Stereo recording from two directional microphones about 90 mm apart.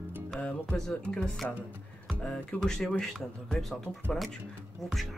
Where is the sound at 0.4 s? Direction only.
10° left (ahead or behind).